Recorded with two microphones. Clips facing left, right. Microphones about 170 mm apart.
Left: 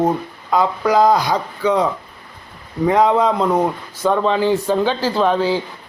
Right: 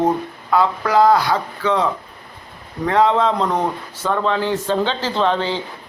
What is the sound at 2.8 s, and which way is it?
Speech, 10° left (ahead or behind).